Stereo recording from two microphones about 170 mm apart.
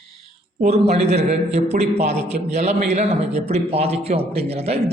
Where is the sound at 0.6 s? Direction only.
40° right (ahead or behind).